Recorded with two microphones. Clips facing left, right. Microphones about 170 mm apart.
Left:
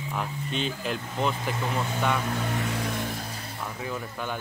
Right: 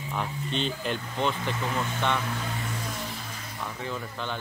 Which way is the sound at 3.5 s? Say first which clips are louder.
Even; 10° left (ahead or behind).